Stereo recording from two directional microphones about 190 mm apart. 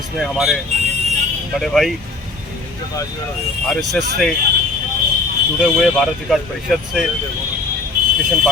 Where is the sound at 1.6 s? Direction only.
Centre (ahead or behind).